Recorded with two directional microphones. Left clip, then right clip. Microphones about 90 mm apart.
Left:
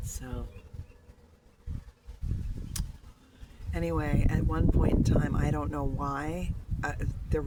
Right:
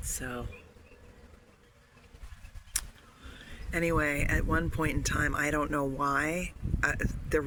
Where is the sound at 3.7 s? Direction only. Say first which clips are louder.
Right 4 dB; 20° left (ahead or behind).